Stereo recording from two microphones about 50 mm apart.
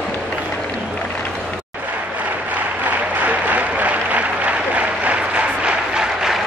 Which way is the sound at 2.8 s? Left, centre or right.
Right.